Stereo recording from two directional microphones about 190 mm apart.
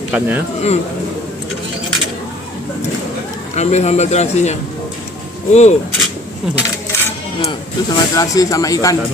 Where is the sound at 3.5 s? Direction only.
35° left (ahead or behind).